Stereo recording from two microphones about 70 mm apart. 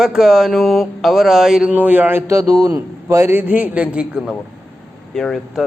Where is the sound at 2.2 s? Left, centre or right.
Right.